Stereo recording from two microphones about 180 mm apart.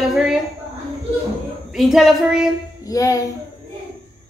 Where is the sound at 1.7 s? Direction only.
Centre (ahead or behind).